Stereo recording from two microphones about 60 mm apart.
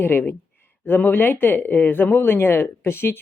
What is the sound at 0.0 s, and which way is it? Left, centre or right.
Speech, left.